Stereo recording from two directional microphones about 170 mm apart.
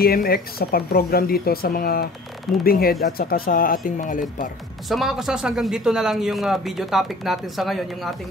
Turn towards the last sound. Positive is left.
turn(degrees=0)  # may be behind; listen again after turning